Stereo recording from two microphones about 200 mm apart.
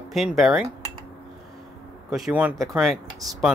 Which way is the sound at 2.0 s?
Centre (ahead or behind).